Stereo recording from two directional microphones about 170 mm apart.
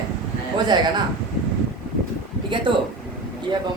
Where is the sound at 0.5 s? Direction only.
25° right (ahead or behind).